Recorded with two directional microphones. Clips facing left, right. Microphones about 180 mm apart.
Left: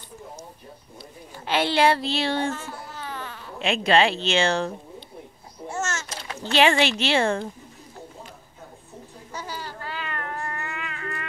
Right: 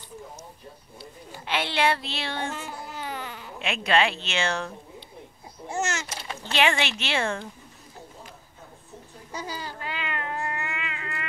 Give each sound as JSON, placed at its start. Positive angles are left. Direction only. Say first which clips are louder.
{"t": 1.4, "sound": "speech", "louder": "left 5 dB", "side_deg": 35}
{"t": 2.5, "sound": "babbling", "louder": "left 1 dB", "side_deg": -15}
{"t": 3.6, "sound": "speech", "louder": "left 4 dB", "side_deg": 30}
{"t": 5.7, "sound": "a sound", "louder": "right 1 dB", "side_deg": -15}
{"t": 6.5, "sound": "speech", "louder": "left 5 dB", "side_deg": 35}
{"t": 9.3, "sound": "cat", "louder": "even", "side_deg": -15}